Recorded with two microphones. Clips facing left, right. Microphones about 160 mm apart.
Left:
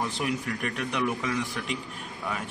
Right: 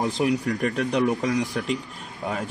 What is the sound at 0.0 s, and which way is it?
Speech, 35° right (ahead or behind).